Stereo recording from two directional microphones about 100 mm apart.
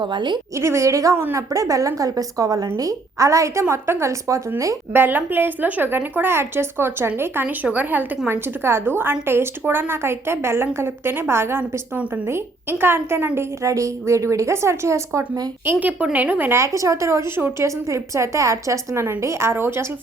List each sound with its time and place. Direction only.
0.0 s a woman's voice: 50° right (ahead or behind)
0.6 s a woman's voice: 30° right (ahead or behind)
12.8 s a woman's voice: 25° right (ahead or behind)
15.6 s a woman's voice: 20° right (ahead or behind)